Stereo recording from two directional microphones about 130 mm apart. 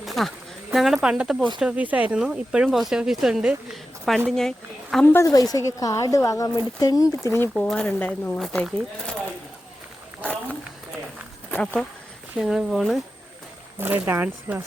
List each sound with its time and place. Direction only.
0.0 s a sound: centre (ahead or behind)
1.0 s a woman's voice: 5° right (ahead or behind)
5.0 s a woman's voice: 20° left (ahead or behind)
7.5 s speech: 5° left (ahead or behind)
8.4 s a woman's voice: centre (ahead or behind)
10.2 s a sound: 10° left (ahead or behind)
11.5 s speech: 10° left (ahead or behind)
12.4 s a woman's voice: 5° right (ahead or behind)
13.7 s speech: 15° right (ahead or behind)